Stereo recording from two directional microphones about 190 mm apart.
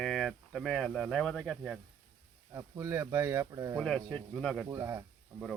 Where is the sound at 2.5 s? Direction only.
15° right (ahead or behind).